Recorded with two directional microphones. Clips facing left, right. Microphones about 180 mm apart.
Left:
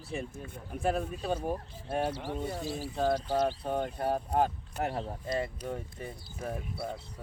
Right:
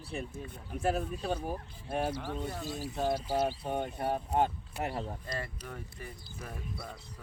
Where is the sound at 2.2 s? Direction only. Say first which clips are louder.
Left 2 dB; 10° left (ahead or behind).